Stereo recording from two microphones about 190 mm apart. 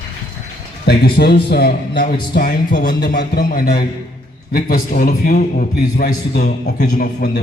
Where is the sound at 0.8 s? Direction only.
55° left (ahead or behind).